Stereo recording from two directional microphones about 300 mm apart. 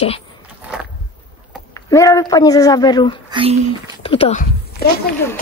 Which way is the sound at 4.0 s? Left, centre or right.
Centre.